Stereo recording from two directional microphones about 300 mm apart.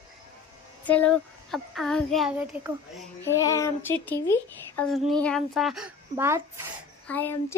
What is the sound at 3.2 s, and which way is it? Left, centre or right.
A child's voice, centre.